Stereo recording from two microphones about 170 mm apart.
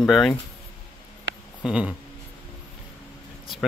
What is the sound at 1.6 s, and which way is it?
Speech, 5° right (ahead or behind).